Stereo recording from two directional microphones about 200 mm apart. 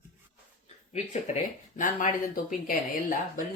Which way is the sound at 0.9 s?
35° left (ahead or behind).